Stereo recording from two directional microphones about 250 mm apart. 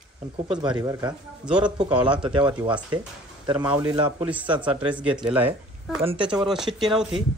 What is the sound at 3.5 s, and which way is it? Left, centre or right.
Speech, centre.